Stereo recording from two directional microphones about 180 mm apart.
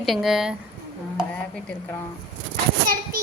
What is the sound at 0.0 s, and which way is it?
Speech, centre (ahead or behind).